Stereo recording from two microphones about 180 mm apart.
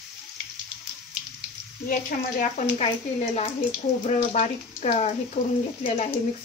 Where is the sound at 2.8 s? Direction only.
40° left (ahead or behind).